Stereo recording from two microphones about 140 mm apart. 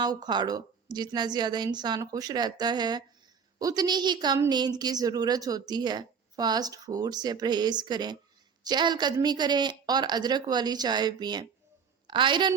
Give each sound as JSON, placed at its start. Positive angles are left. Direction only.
{"t": 0.0, "sound": "a woman's voice", "side_deg": -30}